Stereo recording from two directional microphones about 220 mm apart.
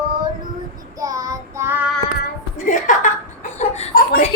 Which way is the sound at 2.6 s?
35° left (ahead or behind).